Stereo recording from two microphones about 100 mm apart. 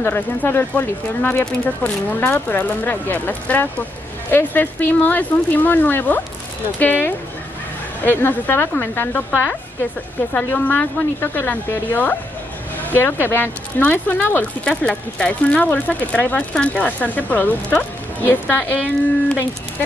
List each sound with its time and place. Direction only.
0.0 s speech: 20° left (ahead or behind)